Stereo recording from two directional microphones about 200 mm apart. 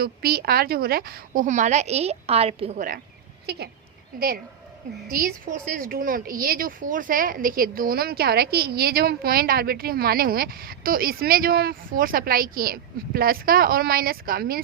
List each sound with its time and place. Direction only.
0.0 s a woman's voice: 50° right (ahead or behind); by 2.8 s 30° right (ahead or behind)
5.0 s a woman's voice: 45° right (ahead or behind)